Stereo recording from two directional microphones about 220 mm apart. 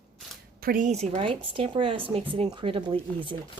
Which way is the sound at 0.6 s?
40° right (ahead or behind).